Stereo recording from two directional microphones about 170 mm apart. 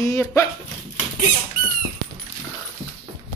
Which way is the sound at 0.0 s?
15° left (ahead or behind).